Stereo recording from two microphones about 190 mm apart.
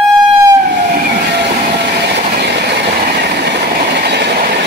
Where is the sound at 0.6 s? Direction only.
50° right (ahead or behind).